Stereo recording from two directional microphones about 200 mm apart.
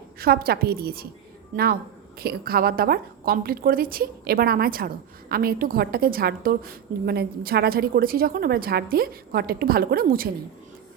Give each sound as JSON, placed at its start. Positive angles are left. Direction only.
{"t": 0.2, "sound": "a woman's voice", "side_deg": -50}
{"t": 2.1, "sound": "a woman's voice", "side_deg": -50}